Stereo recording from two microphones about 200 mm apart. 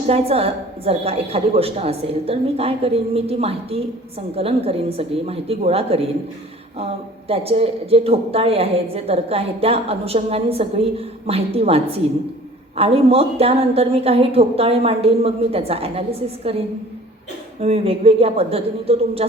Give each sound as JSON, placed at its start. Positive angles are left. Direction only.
{"t": 0.1, "sound": "a woman's voice", "side_deg": -30}
{"t": 7.3, "sound": "a woman's voice", "side_deg": -30}
{"t": 17.6, "sound": "a woman's voice", "side_deg": -30}